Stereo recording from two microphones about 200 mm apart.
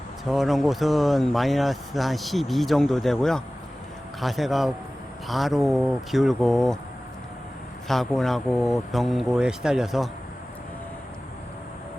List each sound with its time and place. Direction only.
0.3 s speech: centre (ahead or behind)
7.9 s speech: centre (ahead or behind)